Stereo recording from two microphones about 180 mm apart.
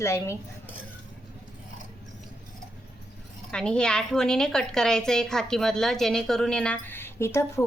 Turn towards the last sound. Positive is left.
turn(degrees=15)  # may be behind; listen again after turning